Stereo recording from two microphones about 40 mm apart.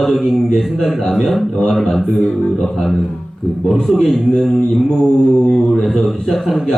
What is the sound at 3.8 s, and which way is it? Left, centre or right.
A man's voice, centre.